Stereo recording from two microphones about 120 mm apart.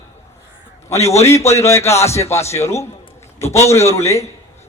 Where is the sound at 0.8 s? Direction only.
25° left (ahead or behind).